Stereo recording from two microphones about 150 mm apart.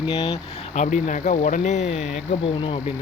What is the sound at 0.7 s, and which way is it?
Speech, 55° left (ahead or behind).